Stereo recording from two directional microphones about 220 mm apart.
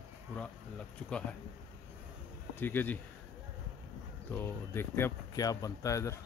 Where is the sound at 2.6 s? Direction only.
10° left (ahead or behind).